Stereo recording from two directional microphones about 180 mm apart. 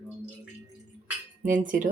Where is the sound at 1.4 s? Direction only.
45° right (ahead or behind).